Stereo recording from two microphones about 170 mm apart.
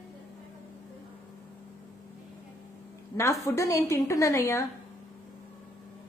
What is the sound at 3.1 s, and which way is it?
A woman's voice, 15° left (ahead or behind).